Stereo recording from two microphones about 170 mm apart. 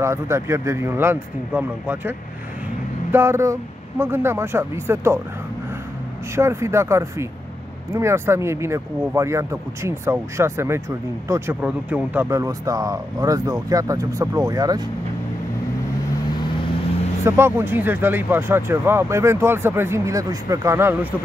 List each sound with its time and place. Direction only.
0.0 s speech: 15° right (ahead or behind)
6.3 s speech: 15° right (ahead or behind)
17.2 s speech: 15° right (ahead or behind)